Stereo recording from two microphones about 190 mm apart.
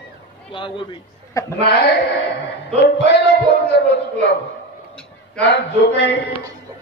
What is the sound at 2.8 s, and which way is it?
A man's voice, 60° left (ahead or behind).